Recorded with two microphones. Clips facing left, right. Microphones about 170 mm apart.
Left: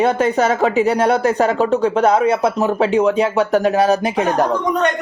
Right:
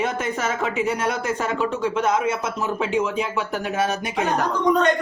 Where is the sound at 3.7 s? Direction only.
35° left (ahead or behind).